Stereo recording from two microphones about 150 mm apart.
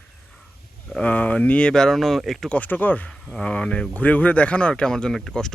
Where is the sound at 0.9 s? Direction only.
5° left (ahead or behind).